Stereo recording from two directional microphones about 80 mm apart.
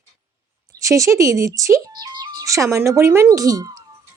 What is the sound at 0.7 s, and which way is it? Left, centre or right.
Speech, right.